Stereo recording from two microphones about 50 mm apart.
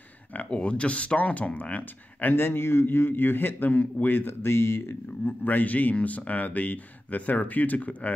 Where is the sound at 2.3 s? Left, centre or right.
Left.